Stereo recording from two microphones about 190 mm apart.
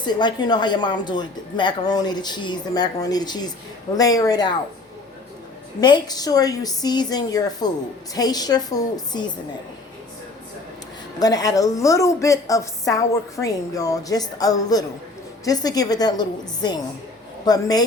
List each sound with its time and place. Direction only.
0.0 s a woman's voice: 25° left (ahead or behind)
5.8 s a woman's voice: 20° left (ahead or behind)
11.2 s a woman's voice: 20° left (ahead or behind)